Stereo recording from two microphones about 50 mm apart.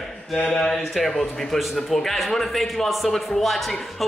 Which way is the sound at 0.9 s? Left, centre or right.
Centre.